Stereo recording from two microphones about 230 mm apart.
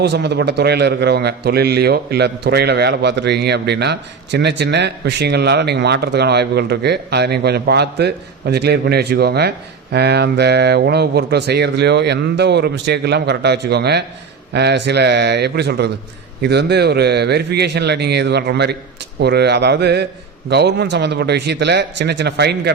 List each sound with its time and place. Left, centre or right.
0.0 s a man's voice: right